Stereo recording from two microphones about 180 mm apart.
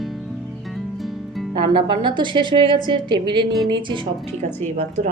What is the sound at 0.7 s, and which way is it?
Music, centre (ahead or behind).